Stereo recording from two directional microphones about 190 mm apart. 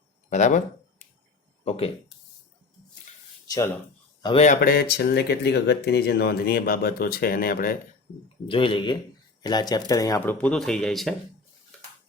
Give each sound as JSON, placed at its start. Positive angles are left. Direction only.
{"t": 0.3, "sound": "a sound", "side_deg": 40}
{"t": 1.6, "sound": "speech", "side_deg": 30}
{"t": 3.4, "sound": "a sound", "side_deg": 20}
{"t": 4.2, "sound": "speech", "side_deg": 25}
{"t": 4.4, "sound": "speech", "side_deg": 50}
{"t": 8.4, "sound": "speech", "side_deg": 25}
{"t": 10.2, "sound": "speech", "side_deg": 10}